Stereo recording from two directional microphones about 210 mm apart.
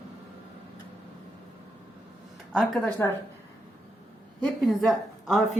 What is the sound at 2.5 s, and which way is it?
Speech, centre (ahead or behind).